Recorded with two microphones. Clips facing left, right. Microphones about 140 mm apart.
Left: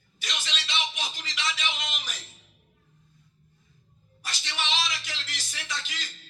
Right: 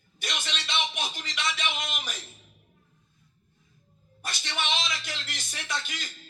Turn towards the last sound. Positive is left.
turn(degrees=-50)  # may be behind; listen again after turning